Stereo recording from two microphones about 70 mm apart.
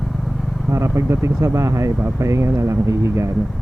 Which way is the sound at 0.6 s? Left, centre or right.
Right.